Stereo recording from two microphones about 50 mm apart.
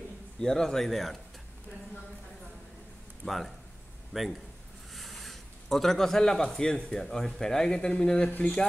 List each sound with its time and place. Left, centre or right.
0.4 s speech: centre
3.3 s a man's voice: centre